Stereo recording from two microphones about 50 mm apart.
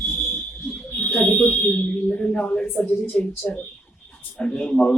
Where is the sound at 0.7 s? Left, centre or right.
Left.